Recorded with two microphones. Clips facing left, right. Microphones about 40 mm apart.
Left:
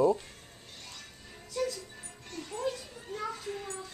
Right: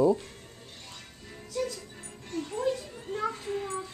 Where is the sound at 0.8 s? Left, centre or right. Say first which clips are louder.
Right 1 dB; centre.